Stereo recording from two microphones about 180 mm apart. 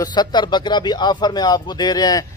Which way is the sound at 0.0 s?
25° left (ahead or behind).